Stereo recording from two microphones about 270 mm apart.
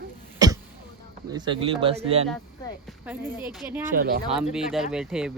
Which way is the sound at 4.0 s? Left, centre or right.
Right.